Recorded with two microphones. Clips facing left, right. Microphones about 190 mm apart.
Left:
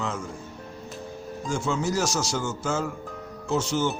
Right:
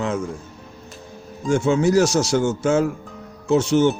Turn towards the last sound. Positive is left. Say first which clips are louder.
# right 9 dB
turn(degrees=-60)  # may be behind; listen again after turning